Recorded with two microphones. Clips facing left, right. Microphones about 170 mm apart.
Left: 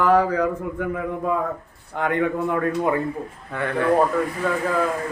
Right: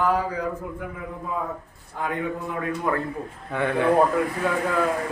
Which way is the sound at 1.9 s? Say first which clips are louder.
Left 6 dB; 70° left (ahead or behind).